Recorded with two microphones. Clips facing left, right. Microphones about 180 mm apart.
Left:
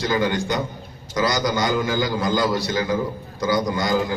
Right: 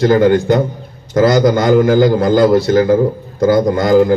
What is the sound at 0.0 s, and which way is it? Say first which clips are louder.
A man's voice: right 12 dB; 55° right (ahead or behind).